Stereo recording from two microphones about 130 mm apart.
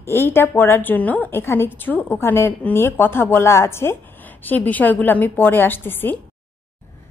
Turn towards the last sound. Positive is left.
turn(degrees=15)  # may be behind; listen again after turning